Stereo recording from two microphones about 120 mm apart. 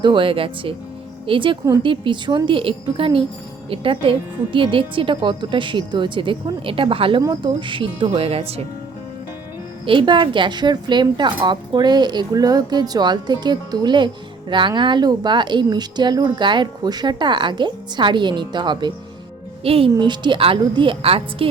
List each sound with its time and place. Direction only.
0.0 s a woman's voice: 45° right (ahead or behind)
9.8 s speech: 45° right (ahead or behind)
19.6 s a woman's voice: 50° right (ahead or behind)